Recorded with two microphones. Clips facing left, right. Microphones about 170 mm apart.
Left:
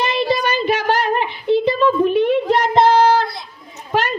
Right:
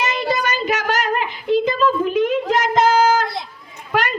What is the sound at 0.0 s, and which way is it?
Child singing, 30° left (ahead or behind).